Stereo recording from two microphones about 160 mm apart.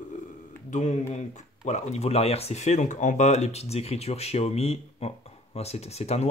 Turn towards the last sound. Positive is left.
turn(degrees=40)  # may be behind; listen again after turning